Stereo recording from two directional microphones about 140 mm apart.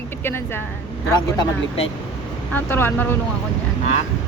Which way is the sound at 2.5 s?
15° left (ahead or behind).